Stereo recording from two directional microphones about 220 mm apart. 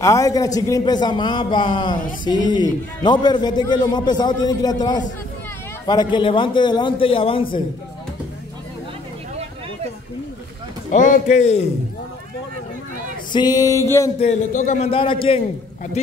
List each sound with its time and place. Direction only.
0.0 s music: 15° left (ahead or behind)
0.6 s a man's voice: 15° left (ahead or behind)
10.9 s speech: 35° left (ahead or behind)
13.3 s music: 20° left (ahead or behind)
14.2 s a man's voice: 35° left (ahead or behind)